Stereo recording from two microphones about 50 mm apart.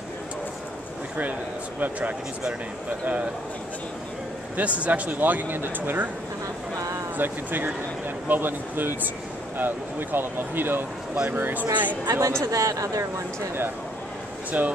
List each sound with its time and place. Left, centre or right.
1.8 s speech: right
4.6 s speech: right
7.2 s speech: right
12.2 s speech: right
14.5 s speech: right